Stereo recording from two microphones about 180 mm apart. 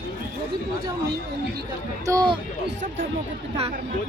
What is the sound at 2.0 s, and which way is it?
Speech, 25° right (ahead or behind).